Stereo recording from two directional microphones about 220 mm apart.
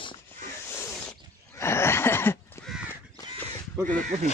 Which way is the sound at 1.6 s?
10° left (ahead or behind).